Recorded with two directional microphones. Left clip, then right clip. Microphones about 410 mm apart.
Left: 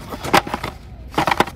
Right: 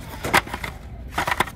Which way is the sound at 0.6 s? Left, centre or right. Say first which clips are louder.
Left 3 dB; centre.